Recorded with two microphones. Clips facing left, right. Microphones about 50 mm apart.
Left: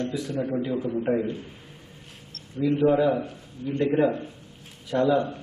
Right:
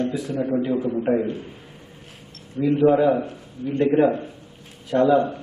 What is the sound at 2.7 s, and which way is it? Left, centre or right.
A man's voice, centre.